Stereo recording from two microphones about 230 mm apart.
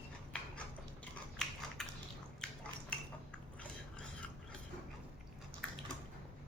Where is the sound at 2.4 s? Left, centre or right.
Centre.